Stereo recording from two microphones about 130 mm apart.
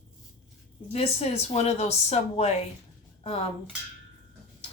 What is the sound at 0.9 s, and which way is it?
Speech, 50° left (ahead or behind).